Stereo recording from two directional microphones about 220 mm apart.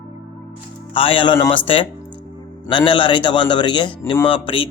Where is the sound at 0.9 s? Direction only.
25° left (ahead or behind).